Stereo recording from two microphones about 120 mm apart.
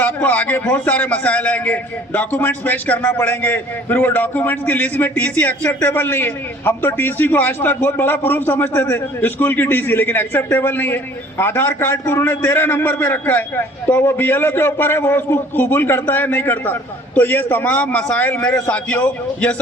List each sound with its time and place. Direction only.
0.0 s a man's voice: 10° left (ahead or behind)